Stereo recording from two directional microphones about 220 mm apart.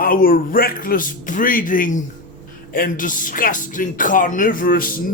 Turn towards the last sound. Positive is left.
turn(degrees=40)  # may be behind; listen again after turning